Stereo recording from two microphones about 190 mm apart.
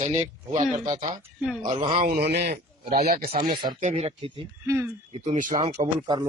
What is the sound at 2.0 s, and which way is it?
Speech, 55° right (ahead or behind).